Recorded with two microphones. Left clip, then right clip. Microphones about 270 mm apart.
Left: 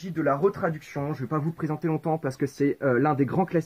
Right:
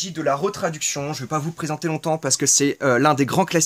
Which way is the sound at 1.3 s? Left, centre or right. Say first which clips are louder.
Right 5 dB; right.